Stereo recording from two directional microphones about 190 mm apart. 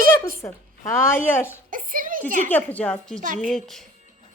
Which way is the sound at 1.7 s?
45° right (ahead or behind).